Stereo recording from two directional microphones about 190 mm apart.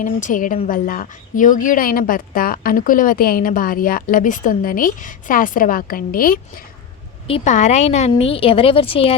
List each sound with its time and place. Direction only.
0.0 s a woman's voice: 40° left (ahead or behind)
7.3 s a woman's voice: 35° left (ahead or behind)